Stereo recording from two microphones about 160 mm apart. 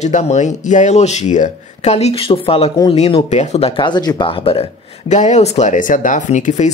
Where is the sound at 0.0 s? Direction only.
45° left (ahead or behind).